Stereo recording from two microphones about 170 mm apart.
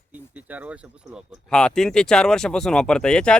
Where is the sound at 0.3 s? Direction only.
10° right (ahead or behind).